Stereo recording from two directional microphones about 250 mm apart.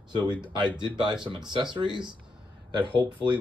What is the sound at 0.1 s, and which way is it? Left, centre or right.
Speech, centre.